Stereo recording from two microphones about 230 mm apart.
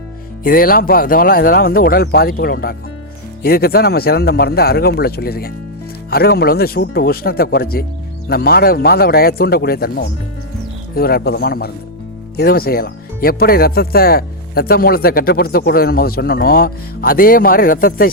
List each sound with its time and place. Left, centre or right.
0.4 s speech: left